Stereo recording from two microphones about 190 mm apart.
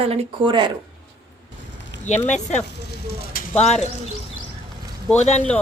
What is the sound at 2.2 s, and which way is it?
Speech, 40° left (ahead or behind).